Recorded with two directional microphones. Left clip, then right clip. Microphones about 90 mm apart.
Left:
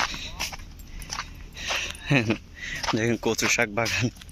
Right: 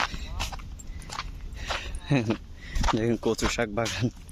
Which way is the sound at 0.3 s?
25° right (ahead or behind).